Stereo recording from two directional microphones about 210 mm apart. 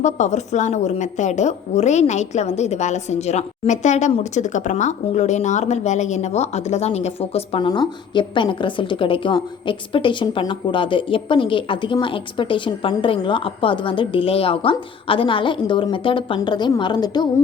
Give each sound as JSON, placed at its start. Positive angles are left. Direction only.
{"t": 0.0, "sound": "a woman's voice", "side_deg": 35}